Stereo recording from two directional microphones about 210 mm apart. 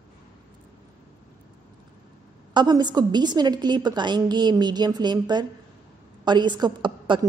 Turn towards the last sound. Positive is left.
turn(degrees=-20)  # may be behind; listen again after turning